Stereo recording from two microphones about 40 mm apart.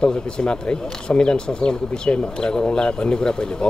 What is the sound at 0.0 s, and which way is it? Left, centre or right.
Speech, left.